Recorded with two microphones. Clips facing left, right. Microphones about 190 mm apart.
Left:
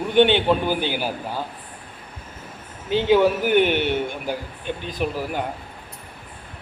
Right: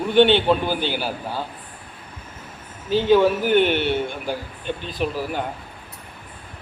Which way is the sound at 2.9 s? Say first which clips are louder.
Right 1 dB; 15° left (ahead or behind).